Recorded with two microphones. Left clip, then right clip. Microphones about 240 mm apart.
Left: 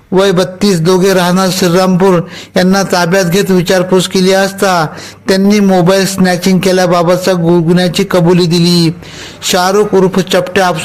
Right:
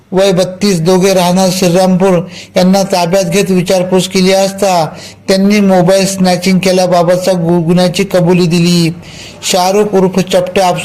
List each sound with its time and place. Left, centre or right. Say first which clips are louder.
0.2 s a man's voice: even; left